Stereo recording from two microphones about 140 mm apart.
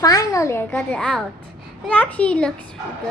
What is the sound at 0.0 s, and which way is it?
Speech, 25° left (ahead or behind).